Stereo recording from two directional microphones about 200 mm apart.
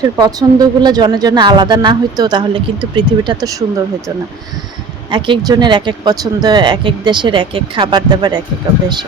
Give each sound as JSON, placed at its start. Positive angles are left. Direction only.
{"t": 0.0, "sound": "speech", "side_deg": -20}
{"t": 5.1, "sound": "speech", "side_deg": -25}